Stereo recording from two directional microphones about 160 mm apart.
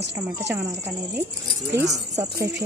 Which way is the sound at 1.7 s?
20° right (ahead or behind).